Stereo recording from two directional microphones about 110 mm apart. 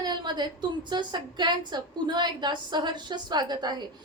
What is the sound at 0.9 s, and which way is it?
A woman's voice, 40° right (ahead or behind).